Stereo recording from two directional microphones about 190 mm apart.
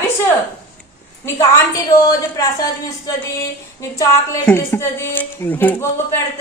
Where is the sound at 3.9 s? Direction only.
15° left (ahead or behind).